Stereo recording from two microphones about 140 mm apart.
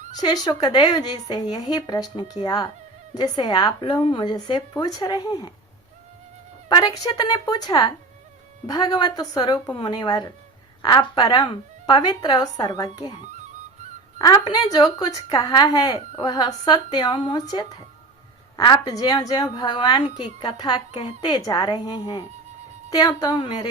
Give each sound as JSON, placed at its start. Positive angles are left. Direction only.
{"t": 0.2, "sound": "a woman's voice", "side_deg": 30}
{"t": 6.7, "sound": "a woman's voice", "side_deg": 30}
{"t": 14.3, "sound": "speech", "side_deg": 35}